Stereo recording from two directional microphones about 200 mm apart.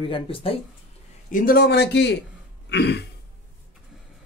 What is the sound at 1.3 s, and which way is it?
Speech, 50° left (ahead or behind).